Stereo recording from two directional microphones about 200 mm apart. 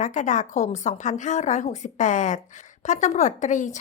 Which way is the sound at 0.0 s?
35° left (ahead or behind).